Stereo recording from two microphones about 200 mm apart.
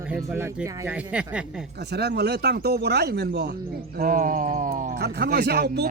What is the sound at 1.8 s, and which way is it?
Speech, 55° right (ahead or behind).